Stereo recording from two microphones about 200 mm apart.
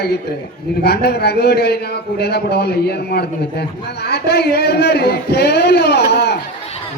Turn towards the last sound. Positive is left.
turn(degrees=55)  # may be behind; listen again after turning